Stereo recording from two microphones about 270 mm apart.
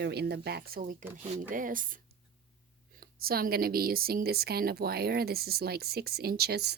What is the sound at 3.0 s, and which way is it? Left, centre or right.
A woman's voice, right.